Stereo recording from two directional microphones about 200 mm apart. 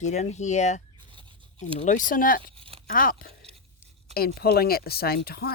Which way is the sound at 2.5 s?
25° right (ahead or behind).